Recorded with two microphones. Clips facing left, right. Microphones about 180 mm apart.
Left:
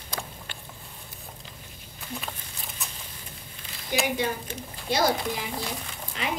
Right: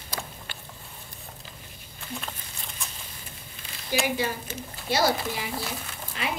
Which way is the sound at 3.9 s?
5° right (ahead or behind).